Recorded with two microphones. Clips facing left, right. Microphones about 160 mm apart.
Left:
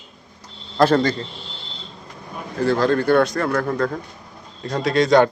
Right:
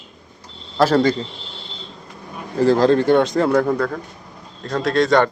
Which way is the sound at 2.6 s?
35° right (ahead or behind).